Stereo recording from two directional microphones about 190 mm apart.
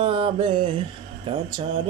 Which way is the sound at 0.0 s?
30° right (ahead or behind).